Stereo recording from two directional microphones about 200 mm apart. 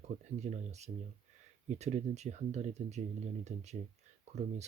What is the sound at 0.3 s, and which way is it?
Speech, 35° right (ahead or behind).